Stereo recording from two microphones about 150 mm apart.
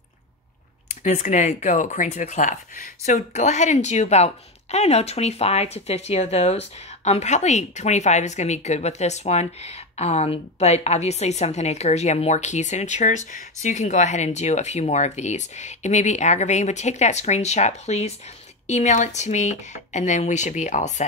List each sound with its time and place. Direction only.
1.0 s speech: 55° left (ahead or behind)